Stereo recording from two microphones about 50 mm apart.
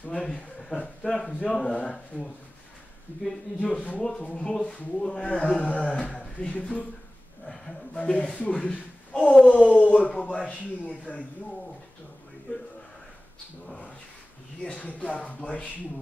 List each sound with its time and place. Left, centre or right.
0.2 s speech: centre
3.5 s speech: left
7.4 s speech: centre
7.9 s a man's voice: left
14.6 s speech: centre